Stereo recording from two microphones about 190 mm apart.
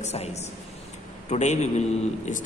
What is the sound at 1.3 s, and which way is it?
Speech, 35° left (ahead or behind).